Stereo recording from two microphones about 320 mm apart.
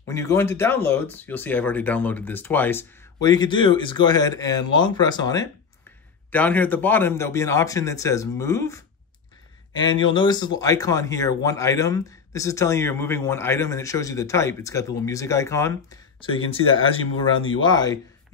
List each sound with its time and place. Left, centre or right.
0.1 s speech: centre